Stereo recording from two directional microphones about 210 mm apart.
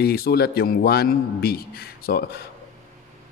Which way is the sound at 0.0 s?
50° left (ahead or behind).